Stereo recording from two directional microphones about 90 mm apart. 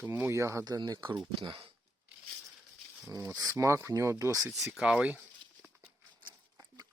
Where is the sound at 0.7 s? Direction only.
50° right (ahead or behind).